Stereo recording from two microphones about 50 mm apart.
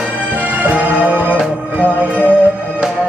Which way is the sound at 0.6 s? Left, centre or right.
Right.